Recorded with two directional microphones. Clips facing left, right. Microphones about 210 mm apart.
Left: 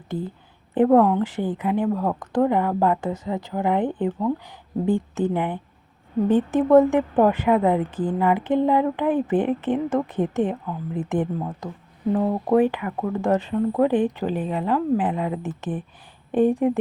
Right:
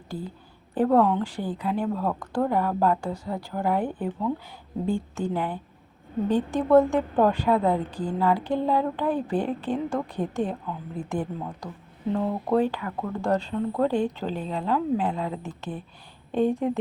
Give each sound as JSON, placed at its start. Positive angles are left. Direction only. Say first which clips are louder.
{"t": 0.7, "sound": "speech", "louder": "left 5 dB", "side_deg": 20}
{"t": 0.9, "sound": "speech", "louder": "left 4 dB", "side_deg": 10}